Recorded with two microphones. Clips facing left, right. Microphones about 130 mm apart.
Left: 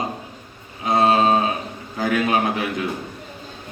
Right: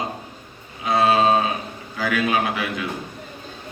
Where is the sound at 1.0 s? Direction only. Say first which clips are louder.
Left 1 dB; 30° left (ahead or behind).